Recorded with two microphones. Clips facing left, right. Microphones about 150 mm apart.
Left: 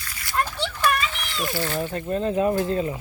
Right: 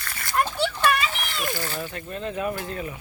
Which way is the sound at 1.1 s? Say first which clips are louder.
Right 2 dB; 45° right (ahead or behind).